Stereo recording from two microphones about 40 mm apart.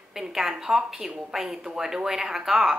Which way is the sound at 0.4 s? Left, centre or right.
Centre.